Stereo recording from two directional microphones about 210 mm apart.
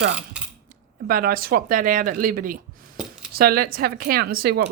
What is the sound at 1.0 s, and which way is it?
Speech, 45° right (ahead or behind).